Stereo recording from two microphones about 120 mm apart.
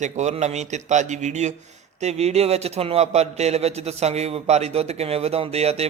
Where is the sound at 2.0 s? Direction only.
65° right (ahead or behind).